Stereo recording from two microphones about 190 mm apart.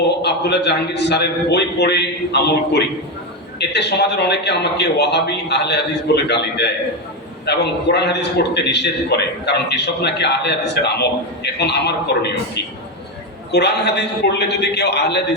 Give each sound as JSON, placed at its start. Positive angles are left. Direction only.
{"t": 0.2, "sound": "a man's voice", "side_deg": 65}
{"t": 13.5, "sound": "a man's voice", "side_deg": 60}